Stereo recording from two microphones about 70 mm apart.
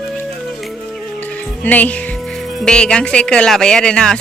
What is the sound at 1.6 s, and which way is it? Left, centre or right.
Speech, left.